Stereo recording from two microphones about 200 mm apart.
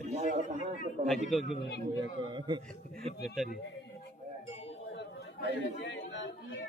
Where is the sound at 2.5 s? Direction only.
25° right (ahead or behind).